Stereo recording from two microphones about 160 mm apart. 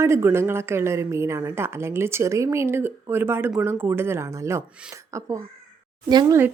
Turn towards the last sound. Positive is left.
turn(degrees=-25)  # may be behind; listen again after turning